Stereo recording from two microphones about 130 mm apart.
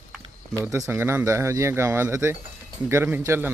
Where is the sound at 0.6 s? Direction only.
20° right (ahead or behind).